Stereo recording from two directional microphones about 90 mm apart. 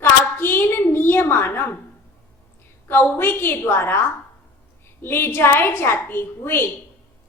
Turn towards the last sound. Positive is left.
turn(degrees=25)  # may be behind; listen again after turning